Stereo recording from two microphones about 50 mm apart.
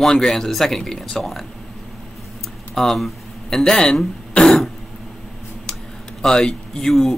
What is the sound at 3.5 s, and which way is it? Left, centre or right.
Speech, centre.